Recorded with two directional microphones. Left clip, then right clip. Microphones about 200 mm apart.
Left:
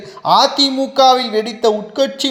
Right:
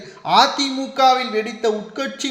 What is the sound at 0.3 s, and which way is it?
A woman's voice, 30° left (ahead or behind).